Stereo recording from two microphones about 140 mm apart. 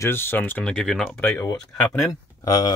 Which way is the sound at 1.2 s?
15° left (ahead or behind).